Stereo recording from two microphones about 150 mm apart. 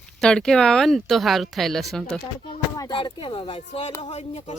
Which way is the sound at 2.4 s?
30° left (ahead or behind).